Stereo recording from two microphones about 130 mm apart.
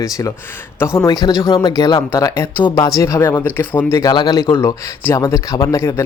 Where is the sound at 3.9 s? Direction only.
30° left (ahead or behind).